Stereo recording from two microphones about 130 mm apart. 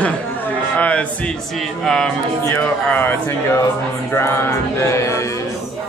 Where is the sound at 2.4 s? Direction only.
15° left (ahead or behind).